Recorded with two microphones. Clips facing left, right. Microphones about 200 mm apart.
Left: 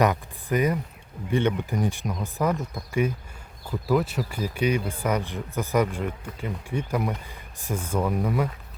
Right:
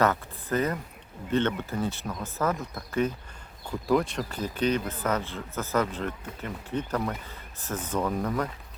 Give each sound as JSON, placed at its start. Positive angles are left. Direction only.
{"t": 0.0, "sound": "speech", "side_deg": 15}